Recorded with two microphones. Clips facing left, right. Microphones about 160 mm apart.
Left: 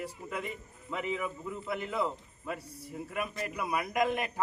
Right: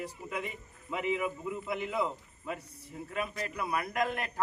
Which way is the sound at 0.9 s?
5° right (ahead or behind).